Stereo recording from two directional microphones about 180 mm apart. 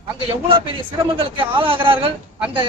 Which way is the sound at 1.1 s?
30° right (ahead or behind).